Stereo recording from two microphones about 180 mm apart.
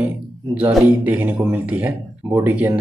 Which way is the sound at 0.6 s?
10° right (ahead or behind).